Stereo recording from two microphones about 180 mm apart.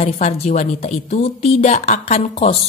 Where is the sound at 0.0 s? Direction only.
40° left (ahead or behind).